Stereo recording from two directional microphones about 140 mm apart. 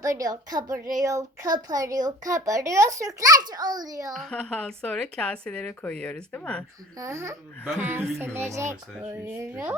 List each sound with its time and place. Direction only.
0.0 s a child's voice: 25° right (ahead or behind)
4.1 s speech: 5° left (ahead or behind)
7.0 s a child's voice: 20° right (ahead or behind)